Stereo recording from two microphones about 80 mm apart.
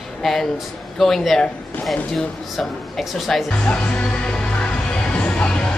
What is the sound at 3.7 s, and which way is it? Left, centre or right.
Music, centre.